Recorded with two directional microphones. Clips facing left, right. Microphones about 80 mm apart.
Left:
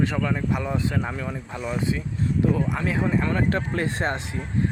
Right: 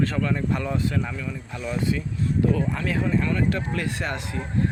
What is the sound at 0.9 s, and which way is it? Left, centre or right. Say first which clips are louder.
Speech: left 1 dB; left.